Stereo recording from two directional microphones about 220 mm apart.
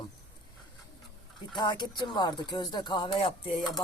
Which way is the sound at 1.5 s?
20° left (ahead or behind).